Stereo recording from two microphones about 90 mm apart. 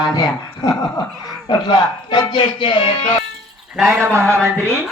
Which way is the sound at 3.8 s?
25° right (ahead or behind).